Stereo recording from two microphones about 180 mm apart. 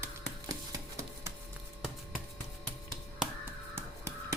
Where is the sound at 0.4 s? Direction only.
20° right (ahead or behind).